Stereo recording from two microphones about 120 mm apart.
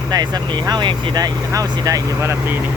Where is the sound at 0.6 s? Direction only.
35° right (ahead or behind).